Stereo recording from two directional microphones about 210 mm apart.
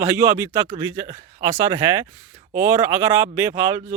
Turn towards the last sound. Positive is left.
turn(degrees=-15)  # may be behind; listen again after turning